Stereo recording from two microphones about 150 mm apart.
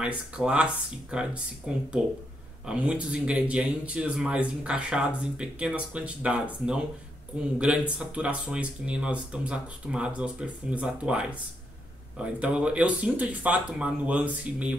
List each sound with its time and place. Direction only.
0.0 s speech: 10° right (ahead or behind)